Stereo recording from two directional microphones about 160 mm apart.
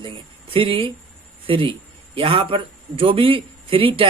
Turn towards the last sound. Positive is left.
turn(degrees=-35)  # may be behind; listen again after turning